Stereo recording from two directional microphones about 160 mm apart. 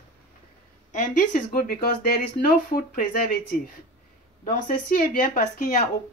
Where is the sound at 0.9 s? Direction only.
50° left (ahead or behind).